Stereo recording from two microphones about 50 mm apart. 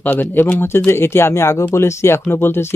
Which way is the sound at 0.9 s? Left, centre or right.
Left.